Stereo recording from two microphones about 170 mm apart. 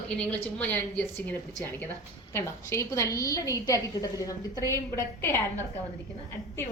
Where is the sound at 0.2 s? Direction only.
10° left (ahead or behind).